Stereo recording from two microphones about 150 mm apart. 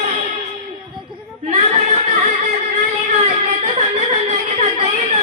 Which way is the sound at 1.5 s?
45° right (ahead or behind).